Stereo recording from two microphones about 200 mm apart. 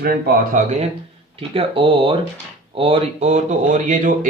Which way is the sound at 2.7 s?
30° right (ahead or behind).